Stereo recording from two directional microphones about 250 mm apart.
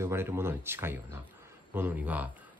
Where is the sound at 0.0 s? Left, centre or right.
Centre.